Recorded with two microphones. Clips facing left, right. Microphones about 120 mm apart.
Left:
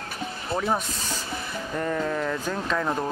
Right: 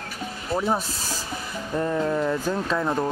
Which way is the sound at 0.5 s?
5° right (ahead or behind).